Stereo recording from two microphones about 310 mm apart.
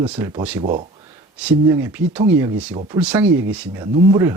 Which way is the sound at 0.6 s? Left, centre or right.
Right.